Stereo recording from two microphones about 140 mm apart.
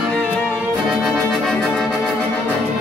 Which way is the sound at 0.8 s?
Centre (ahead or behind).